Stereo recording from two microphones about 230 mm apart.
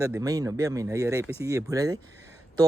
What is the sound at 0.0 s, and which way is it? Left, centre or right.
Speech, centre.